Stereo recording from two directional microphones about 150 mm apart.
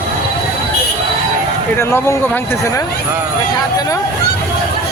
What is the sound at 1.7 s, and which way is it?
Speech, 15° left (ahead or behind).